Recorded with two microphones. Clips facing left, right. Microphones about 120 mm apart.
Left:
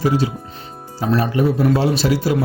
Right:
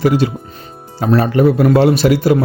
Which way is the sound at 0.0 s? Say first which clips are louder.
Right 4 dB; 70° right (ahead or behind).